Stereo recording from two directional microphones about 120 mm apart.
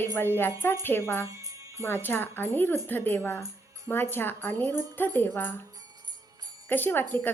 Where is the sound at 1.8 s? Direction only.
15° left (ahead or behind).